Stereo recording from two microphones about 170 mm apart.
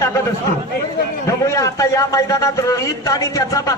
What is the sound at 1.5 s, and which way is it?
A man's voice, 20° left (ahead or behind).